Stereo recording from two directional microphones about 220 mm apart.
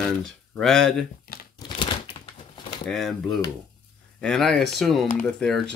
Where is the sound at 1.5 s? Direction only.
20° left (ahead or behind).